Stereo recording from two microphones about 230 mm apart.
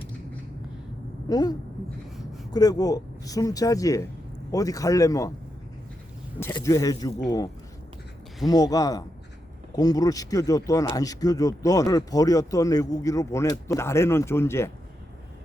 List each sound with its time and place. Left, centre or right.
1.3 s speech: centre
2.1 s a sound: centre
2.5 s speech: centre
6.4 s speech: centre